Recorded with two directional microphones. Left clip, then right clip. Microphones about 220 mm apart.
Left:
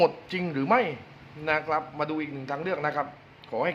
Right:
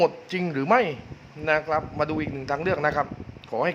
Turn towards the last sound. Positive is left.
turn(degrees=-15)  # may be behind; listen again after turning